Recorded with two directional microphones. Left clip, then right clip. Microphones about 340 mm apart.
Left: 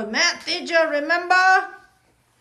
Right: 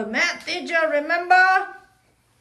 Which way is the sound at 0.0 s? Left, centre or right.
Centre.